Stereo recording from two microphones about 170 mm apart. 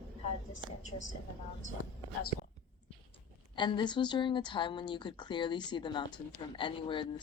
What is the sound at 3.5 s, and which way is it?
Speech, 25° left (ahead or behind).